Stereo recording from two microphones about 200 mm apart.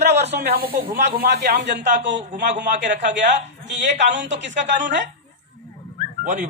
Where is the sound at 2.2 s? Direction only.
40° right (ahead or behind).